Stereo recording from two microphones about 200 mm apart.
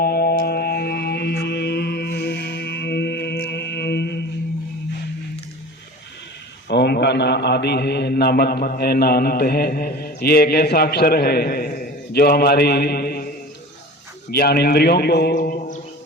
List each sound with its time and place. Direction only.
0.0 s music: 50° left (ahead or behind)
6.7 s a man's voice: 55° left (ahead or behind)
14.3 s a man's voice: 50° left (ahead or behind)
15.4 s mantra: 40° left (ahead or behind)